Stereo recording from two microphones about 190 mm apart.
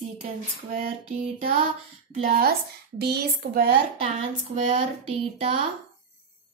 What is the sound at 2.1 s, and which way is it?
A woman's voice, 45° right (ahead or behind).